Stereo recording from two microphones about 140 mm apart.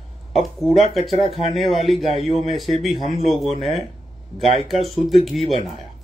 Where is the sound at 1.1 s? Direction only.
45° right (ahead or behind).